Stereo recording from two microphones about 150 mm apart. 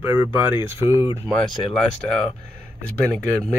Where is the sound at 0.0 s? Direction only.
15° right (ahead or behind).